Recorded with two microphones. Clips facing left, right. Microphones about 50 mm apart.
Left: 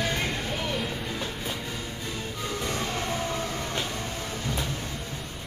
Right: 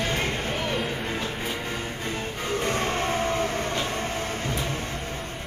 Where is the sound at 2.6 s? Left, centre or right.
Right.